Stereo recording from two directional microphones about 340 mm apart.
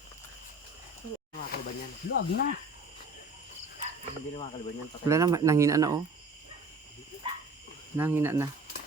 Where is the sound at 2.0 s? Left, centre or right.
Left.